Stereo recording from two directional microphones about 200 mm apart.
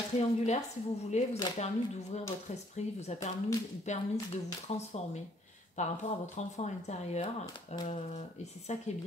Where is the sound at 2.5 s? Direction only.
35° left (ahead or behind).